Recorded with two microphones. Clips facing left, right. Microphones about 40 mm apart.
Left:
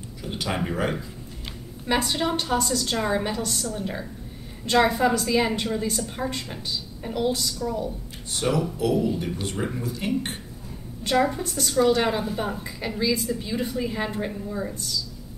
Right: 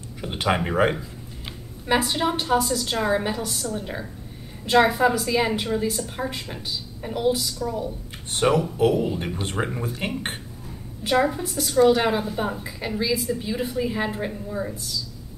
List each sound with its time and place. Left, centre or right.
0.2 s speech: right
1.9 s a woman's voice: centre
8.3 s speech: right
11.1 s a woman's voice: centre